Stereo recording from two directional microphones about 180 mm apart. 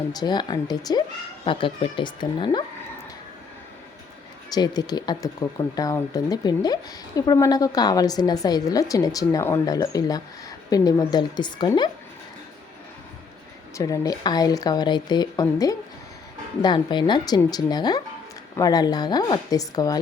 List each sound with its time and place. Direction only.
0.1 s a woman's voice: 20° left (ahead or behind)
4.4 s a woman's voice: 20° left (ahead or behind)
13.7 s a woman's voice: 20° left (ahead or behind)